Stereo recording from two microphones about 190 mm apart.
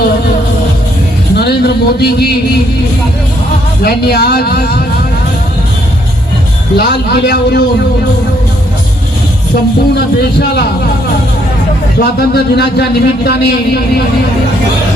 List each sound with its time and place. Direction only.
1.4 s a man's voice: 55° left (ahead or behind)
3.8 s a man's voice: 55° left (ahead or behind)
6.7 s a man's voice: 55° left (ahead or behind)
9.9 s a man's voice: 60° left (ahead or behind)
11.9 s a man's voice: 60° left (ahead or behind)